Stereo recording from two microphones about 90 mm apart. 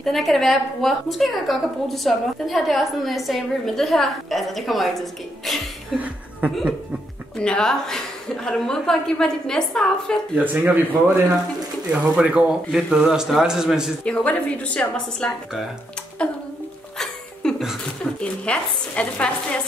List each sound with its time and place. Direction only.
0.0 s a woman's voice: centre (ahead or behind)
5.9 s chuckle: 15° right (ahead or behind)
7.3 s a woman's voice: 10° left (ahead or behind)
10.3 s a man's voice: 20° right (ahead or behind)
14.0 s a woman's voice: 15° left (ahead or behind)
17.0 s a sound: 10° left (ahead or behind)
18.2 s a woman's voice: 10° left (ahead or behind)